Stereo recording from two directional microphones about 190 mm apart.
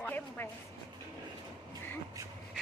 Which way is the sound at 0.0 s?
10° left (ahead or behind).